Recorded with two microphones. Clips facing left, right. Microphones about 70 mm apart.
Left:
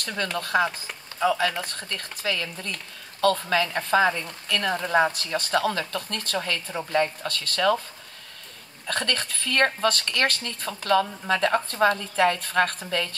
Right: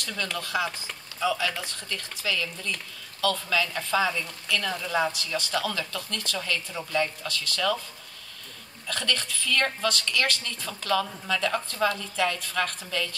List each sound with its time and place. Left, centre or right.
0.0 s speech: left
8.8 s speech: left